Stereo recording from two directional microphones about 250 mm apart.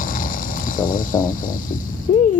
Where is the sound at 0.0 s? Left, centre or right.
Left.